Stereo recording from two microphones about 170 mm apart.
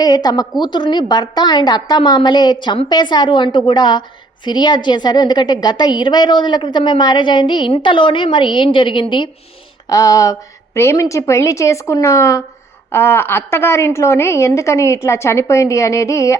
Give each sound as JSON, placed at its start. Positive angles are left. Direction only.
{"t": 0.0, "sound": "a woman's voice", "side_deg": 25}